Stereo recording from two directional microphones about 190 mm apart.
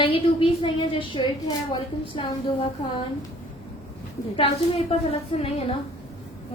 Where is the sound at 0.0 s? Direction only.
30° left (ahead or behind).